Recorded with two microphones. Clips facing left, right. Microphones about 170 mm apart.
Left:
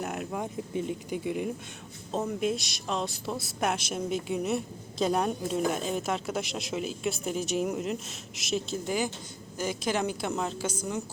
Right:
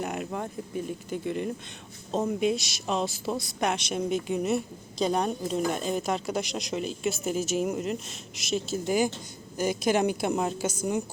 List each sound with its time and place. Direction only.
0.0 s a woman's voice: centre (ahead or behind)
0.4 s speech: 20° left (ahead or behind)
1.2 s a woman's voice: 10° left (ahead or behind); by 10.5 s 15° right (ahead or behind)